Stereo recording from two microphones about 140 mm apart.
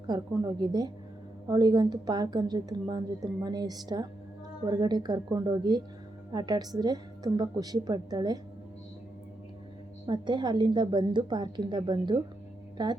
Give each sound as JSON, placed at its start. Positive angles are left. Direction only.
{"t": 0.1, "sound": "a woman's voice", "side_deg": -30}
{"t": 10.1, "sound": "a woman's voice", "side_deg": -35}